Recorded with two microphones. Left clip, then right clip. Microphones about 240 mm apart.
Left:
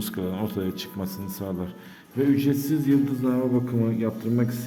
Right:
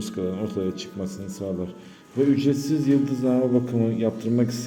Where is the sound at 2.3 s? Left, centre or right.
Centre.